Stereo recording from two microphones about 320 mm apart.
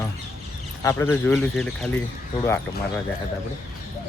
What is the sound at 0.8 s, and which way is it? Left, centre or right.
Speech, centre.